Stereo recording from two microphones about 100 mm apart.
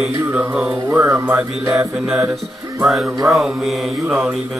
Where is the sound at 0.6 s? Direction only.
25° right (ahead or behind).